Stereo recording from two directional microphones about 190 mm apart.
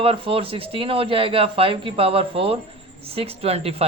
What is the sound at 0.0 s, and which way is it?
Speech, 30° right (ahead or behind).